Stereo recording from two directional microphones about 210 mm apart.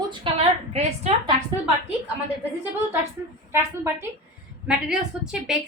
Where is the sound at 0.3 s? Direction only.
25° right (ahead or behind).